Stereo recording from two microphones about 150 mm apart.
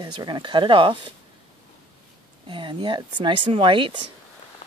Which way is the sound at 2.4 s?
35° right (ahead or behind).